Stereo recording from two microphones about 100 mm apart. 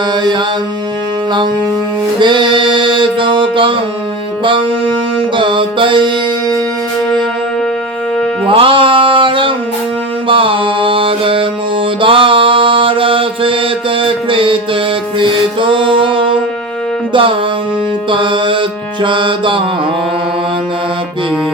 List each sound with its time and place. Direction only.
0.2 s mantra: 50° right (ahead or behind)
2.1 s music: 50° right (ahead or behind)
5.4 s music: 55° right (ahead or behind)
8.4 s music: 60° right (ahead or behind)
10.2 s mantra: 60° right (ahead or behind)
14.0 s music: 60° right (ahead or behind)